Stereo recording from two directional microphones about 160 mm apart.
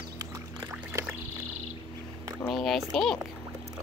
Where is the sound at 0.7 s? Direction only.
15° right (ahead or behind).